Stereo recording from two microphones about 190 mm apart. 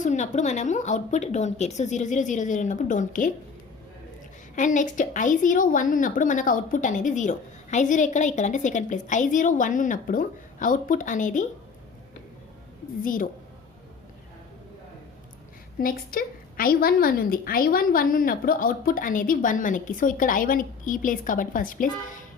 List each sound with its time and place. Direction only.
0.0 s a woman's voice: 40° left (ahead or behind)
4.5 s a woman's voice: 40° left (ahead or behind)
13.0 s a woman's voice: 45° left (ahead or behind)
15.8 s a woman's voice: 50° left (ahead or behind)